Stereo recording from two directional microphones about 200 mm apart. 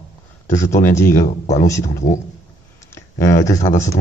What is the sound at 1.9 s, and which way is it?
Speech, 40° left (ahead or behind).